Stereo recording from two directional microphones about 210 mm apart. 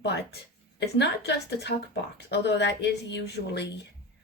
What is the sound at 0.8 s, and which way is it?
A woman's voice, 50° left (ahead or behind).